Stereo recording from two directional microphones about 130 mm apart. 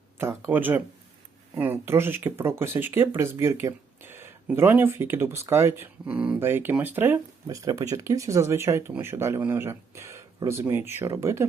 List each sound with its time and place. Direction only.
0.5 s speech: 15° right (ahead or behind)
7.4 s speech: 30° right (ahead or behind)